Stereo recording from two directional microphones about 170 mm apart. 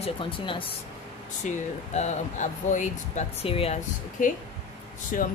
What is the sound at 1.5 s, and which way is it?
Speech, 45° left (ahead or behind).